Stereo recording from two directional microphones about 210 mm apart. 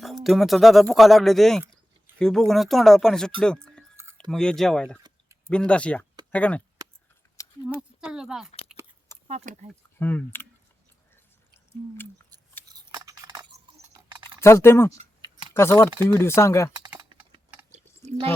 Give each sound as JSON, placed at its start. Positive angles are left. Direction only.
{"t": 0.0, "sound": "speech", "side_deg": 0}
{"t": 3.4, "sound": "a sound", "side_deg": 5}
{"t": 3.9, "sound": "a sound", "side_deg": -10}
{"t": 4.3, "sound": "speech", "side_deg": 0}
{"t": 7.8, "sound": "speech", "side_deg": -5}
{"t": 9.2, "sound": "speech", "side_deg": -30}
{"t": 10.0, "sound": "speech", "side_deg": 10}
{"t": 13.0, "sound": "a sound", "side_deg": -15}
{"t": 13.9, "sound": "typing", "side_deg": -20}
{"t": 14.4, "sound": "speech", "side_deg": 10}
{"t": 14.9, "sound": "a sound", "side_deg": -25}
{"t": 15.5, "sound": "speech", "side_deg": 10}
{"t": 17.7, "sound": "chewing", "side_deg": -35}